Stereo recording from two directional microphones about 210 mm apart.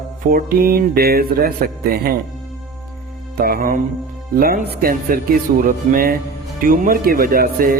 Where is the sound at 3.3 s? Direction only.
45° right (ahead or behind).